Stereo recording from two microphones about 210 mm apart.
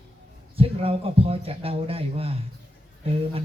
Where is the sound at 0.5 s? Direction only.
25° right (ahead or behind).